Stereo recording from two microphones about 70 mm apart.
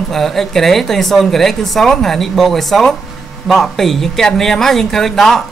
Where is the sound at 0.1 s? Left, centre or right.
Centre.